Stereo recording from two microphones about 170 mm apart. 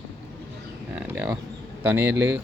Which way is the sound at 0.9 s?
10° right (ahead or behind).